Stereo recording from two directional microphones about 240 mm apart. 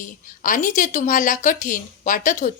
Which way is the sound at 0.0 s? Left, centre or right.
Left.